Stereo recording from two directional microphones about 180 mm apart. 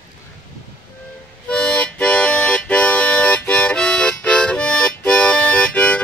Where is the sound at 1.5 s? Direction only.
5° left (ahead or behind).